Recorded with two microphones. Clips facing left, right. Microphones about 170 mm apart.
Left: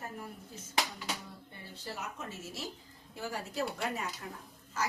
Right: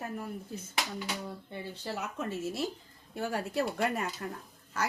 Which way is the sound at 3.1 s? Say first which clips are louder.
Right 6 dB; 60° right (ahead or behind).